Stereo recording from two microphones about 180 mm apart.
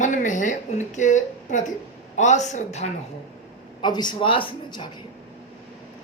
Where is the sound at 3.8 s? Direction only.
25° left (ahead or behind).